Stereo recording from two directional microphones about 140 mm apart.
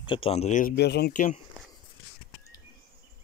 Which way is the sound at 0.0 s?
40° left (ahead or behind).